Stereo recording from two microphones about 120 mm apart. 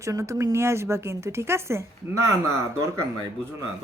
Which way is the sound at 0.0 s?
25° right (ahead or behind).